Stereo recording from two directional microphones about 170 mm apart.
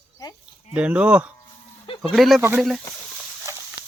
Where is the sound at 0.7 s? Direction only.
5° right (ahead or behind).